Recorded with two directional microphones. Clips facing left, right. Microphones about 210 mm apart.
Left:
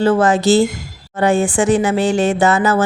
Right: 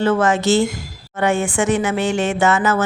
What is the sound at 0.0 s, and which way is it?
Speech, 35° left (ahead or behind).